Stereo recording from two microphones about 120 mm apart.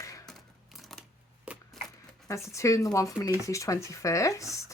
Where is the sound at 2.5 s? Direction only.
25° left (ahead or behind).